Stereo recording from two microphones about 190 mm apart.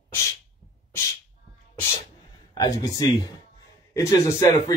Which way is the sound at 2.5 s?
20° left (ahead or behind).